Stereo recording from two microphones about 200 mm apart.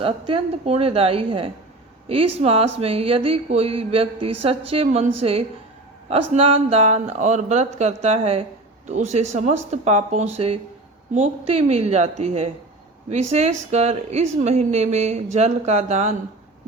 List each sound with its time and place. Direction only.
0.0 s speech: 25° right (ahead or behind)